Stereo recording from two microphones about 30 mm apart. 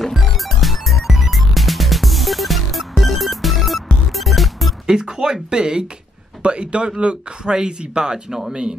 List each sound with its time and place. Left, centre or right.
0.1 s music: centre
5.0 s speech: right
6.4 s speech: right
8.3 s speech: centre